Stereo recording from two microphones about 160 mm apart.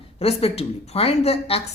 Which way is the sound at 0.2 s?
40° left (ahead or behind).